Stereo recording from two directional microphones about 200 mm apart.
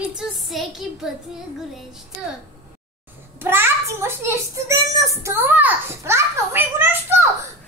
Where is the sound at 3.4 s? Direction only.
10° right (ahead or behind).